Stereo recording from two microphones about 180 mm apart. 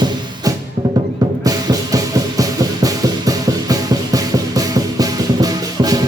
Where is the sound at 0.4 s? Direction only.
20° right (ahead or behind).